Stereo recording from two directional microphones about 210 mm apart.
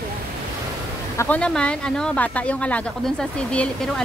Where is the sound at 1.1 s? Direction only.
5° left (ahead or behind).